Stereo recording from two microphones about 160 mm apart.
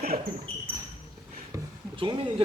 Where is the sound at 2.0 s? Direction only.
30° right (ahead or behind).